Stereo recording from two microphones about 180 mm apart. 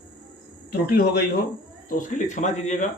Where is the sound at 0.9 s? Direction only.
60° left (ahead or behind).